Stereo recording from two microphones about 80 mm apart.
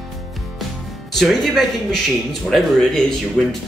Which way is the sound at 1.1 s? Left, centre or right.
Centre.